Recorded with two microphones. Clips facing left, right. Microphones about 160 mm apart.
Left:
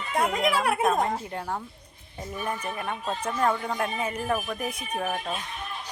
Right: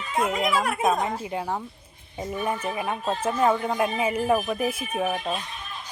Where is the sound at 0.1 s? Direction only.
65° left (ahead or behind).